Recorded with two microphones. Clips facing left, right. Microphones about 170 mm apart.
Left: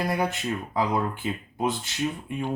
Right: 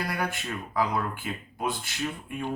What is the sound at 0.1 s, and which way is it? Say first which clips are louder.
Speech: left 5 dB; 20° left (ahead or behind).